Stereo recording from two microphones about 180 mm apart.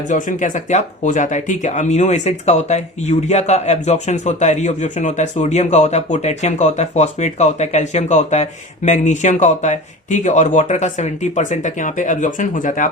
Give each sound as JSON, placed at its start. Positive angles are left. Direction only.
{"t": 0.1, "sound": "speech", "side_deg": 45}